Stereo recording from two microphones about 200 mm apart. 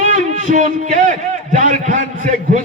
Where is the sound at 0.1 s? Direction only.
35° right (ahead or behind).